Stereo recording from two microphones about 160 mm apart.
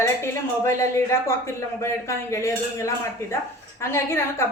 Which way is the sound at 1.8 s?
15° left (ahead or behind).